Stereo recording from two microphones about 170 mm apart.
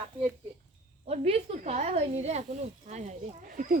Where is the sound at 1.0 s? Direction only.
35° right (ahead or behind); by 3.8 s 55° right (ahead or behind).